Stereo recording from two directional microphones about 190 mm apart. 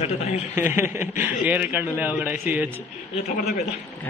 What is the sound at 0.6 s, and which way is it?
A man's voice, 10° right (ahead or behind).